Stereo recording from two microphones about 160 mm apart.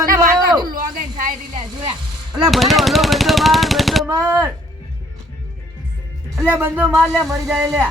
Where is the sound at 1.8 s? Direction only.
25° right (ahead or behind).